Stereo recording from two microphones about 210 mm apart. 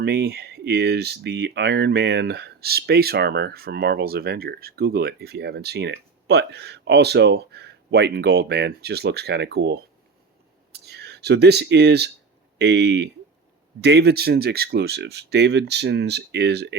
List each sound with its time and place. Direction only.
0.0 s speech: 50° right (ahead or behind)
10.8 s speech: 50° right (ahead or behind)